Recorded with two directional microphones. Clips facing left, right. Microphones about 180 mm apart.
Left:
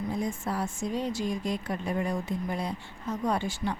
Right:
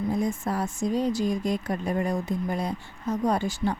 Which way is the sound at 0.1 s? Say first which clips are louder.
Right 4 dB; 45° right (ahead or behind).